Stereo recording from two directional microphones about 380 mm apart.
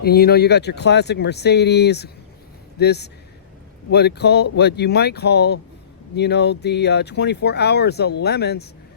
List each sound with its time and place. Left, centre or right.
0.0 s speech: left